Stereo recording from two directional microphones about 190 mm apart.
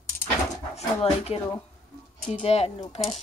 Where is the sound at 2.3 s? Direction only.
35° left (ahead or behind).